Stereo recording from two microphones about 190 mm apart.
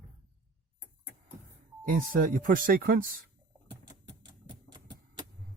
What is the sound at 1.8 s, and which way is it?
Speech, 45° right (ahead or behind).